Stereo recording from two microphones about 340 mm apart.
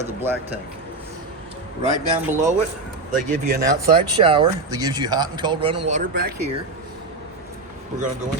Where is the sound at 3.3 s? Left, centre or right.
Right.